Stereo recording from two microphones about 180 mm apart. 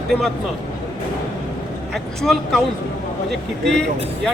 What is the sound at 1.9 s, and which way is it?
Speech, centre (ahead or behind).